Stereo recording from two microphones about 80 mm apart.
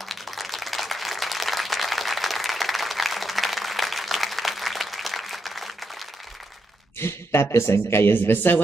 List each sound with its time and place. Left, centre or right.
0.1 s applause: centre
7.0 s speech: left